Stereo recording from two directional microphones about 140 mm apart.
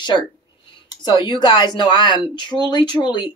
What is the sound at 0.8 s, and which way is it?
Speech, 30° left (ahead or behind).